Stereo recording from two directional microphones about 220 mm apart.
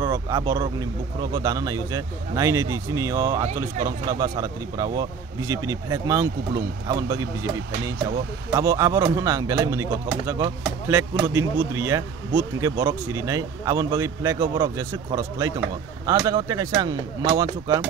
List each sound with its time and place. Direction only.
0.0 s speech: 15° right (ahead or behind)
8.5 s speech: 15° right (ahead or behind)